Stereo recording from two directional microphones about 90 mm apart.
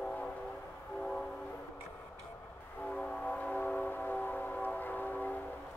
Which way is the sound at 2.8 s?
10° left (ahead or behind).